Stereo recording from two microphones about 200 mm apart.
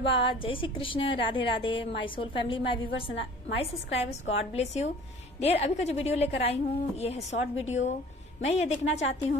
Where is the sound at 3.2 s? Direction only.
65° left (ahead or behind).